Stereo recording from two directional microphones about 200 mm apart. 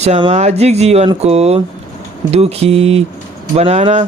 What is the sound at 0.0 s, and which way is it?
Speech, 30° right (ahead or behind).